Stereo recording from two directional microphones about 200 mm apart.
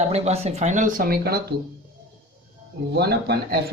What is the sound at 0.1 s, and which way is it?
Speech, 30° right (ahead or behind).